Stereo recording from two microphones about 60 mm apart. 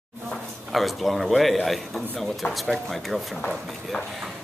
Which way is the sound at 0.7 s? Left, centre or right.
Centre.